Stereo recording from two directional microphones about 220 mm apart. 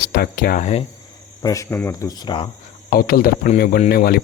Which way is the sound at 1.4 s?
15° left (ahead or behind).